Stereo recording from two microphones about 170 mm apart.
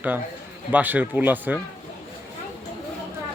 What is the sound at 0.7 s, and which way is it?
Speech, 10° right (ahead or behind).